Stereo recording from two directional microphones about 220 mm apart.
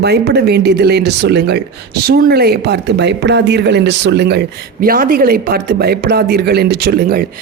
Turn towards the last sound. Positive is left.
turn(degrees=-45)  # may be behind; listen again after turning